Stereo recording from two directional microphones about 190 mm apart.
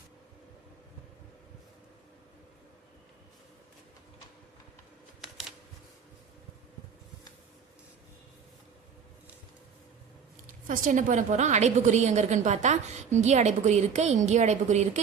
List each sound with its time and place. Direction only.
10.7 s a woman's voice: 40° right (ahead or behind)